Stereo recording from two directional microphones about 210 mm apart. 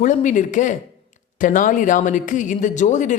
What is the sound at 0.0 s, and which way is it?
Speech, 40° left (ahead or behind).